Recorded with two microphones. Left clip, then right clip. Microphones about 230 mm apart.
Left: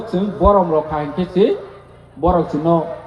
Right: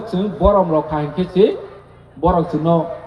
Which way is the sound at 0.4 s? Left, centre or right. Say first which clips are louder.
Left 1 dB; right.